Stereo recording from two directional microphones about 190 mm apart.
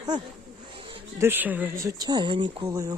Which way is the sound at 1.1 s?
10° right (ahead or behind).